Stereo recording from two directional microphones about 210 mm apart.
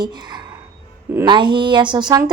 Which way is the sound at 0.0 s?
20° right (ahead or behind).